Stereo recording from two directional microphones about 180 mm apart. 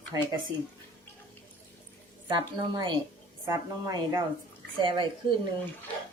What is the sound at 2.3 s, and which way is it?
Speech, 25° right (ahead or behind).